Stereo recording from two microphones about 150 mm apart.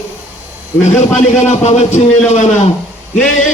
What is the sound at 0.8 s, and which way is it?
A man's voice, 50° left (ahead or behind).